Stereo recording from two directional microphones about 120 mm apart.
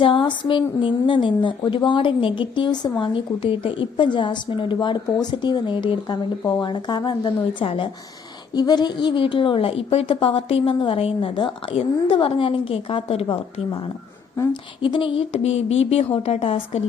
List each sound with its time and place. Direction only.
0.0 s a woman's voice: 45° left (ahead or behind)
8.5 s a woman's voice: 35° left (ahead or behind); by 13.2 s 50° left (ahead or behind)
14.5 s a woman's voice: 45° left (ahead or behind)